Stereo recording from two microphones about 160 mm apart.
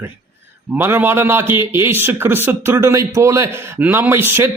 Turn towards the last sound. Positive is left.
turn(degrees=-15)  # may be behind; listen again after turning